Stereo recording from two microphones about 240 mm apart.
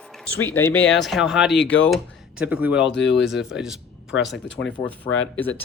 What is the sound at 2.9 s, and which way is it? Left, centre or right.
Speech, left.